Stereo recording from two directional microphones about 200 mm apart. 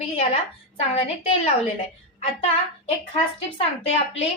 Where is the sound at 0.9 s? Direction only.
30° left (ahead or behind).